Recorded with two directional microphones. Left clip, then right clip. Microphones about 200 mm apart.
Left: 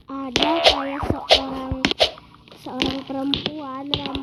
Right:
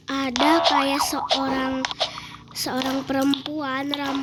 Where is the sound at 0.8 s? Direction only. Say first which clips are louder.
Right 4 dB; 15° right (ahead or behind).